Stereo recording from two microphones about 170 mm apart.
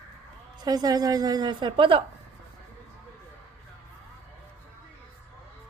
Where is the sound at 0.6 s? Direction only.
25° right (ahead or behind).